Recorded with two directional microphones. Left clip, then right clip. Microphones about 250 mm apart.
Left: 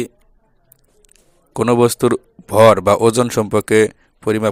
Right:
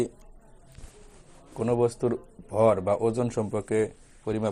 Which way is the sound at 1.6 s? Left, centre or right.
Left.